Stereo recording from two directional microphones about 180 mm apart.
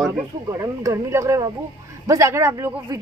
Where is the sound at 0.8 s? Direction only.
15° right (ahead or behind).